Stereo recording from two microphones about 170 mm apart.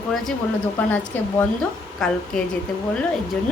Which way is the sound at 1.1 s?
10° left (ahead or behind).